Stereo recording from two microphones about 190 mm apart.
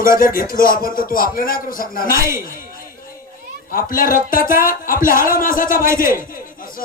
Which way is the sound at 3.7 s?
45° left (ahead or behind).